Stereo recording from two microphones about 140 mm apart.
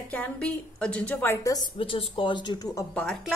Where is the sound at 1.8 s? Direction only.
40° left (ahead or behind).